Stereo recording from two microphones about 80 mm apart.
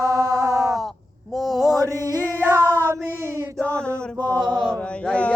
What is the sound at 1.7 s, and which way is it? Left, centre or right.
Music, right.